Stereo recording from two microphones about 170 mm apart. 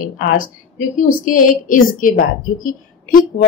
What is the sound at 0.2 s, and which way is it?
A woman's voice, 55° left (ahead or behind).